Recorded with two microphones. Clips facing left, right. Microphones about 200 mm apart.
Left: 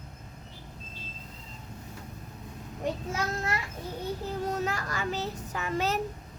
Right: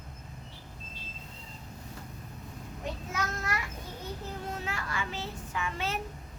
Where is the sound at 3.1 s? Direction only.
30° left (ahead or behind).